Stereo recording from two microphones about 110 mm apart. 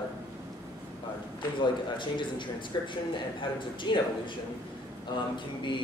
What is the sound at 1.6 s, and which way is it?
A man's voice, 45° left (ahead or behind).